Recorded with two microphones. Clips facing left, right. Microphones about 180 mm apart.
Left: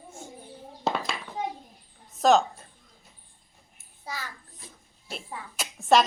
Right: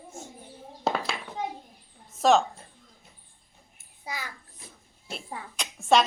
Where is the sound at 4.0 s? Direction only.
15° right (ahead or behind).